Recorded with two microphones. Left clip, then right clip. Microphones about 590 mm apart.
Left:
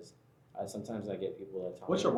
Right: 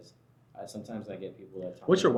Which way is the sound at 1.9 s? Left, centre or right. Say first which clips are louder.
Right 8 dB; right.